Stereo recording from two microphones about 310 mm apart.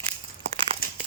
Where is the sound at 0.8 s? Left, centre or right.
Left.